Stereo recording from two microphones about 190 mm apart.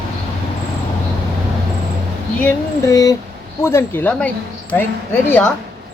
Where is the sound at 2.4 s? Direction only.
15° left (ahead or behind).